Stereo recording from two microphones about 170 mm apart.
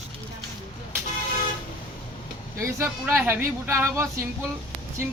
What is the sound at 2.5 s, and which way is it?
Speech, 15° right (ahead or behind).